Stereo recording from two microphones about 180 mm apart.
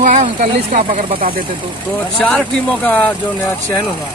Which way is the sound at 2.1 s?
5° left (ahead or behind).